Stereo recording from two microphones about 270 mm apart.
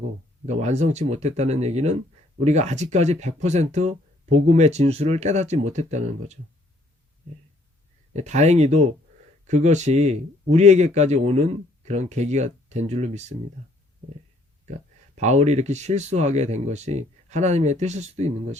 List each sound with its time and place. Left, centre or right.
0.4 s speech: right
8.1 s speech: right
15.1 s speech: right